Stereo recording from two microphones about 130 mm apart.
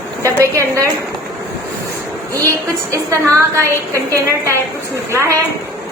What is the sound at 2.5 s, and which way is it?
A woman's voice, 25° right (ahead or behind).